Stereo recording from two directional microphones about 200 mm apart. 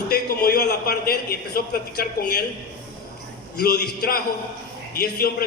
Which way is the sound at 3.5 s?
50° left (ahead or behind).